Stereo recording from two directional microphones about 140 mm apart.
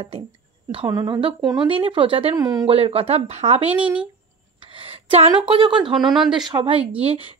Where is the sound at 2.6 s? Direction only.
45° right (ahead or behind).